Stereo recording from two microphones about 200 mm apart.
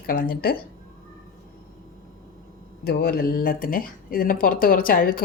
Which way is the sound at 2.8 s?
50° left (ahead or behind).